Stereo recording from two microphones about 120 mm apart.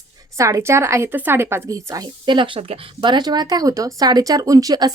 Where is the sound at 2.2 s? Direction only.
45° right (ahead or behind).